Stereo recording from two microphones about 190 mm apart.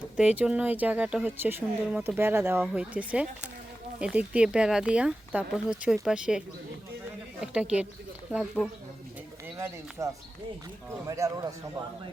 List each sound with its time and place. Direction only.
0.2 s speech: 5° right (ahead or behind)
7.4 s speech: 5° right (ahead or behind)
10.0 s speech: 15° right (ahead or behind)